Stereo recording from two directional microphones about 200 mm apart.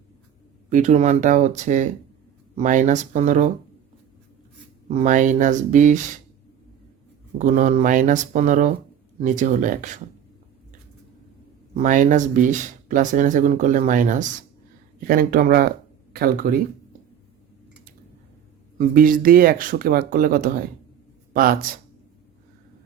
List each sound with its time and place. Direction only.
0.7 s speech: 35° right (ahead or behind)
4.9 s speech: 35° right (ahead or behind)
7.3 s speech: 40° right (ahead or behind)
11.7 s speech: 40° right (ahead or behind)
18.8 s speech: 45° right (ahead or behind)